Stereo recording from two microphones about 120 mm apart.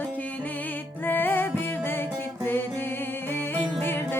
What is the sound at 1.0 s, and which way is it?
Music, 15° left (ahead or behind).